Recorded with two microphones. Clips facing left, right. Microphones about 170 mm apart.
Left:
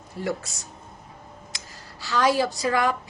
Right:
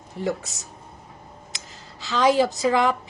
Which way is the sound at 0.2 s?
20° right (ahead or behind).